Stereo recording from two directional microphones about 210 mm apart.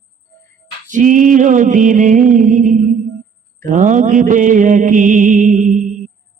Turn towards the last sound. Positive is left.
turn(degrees=-40)  # may be behind; listen again after turning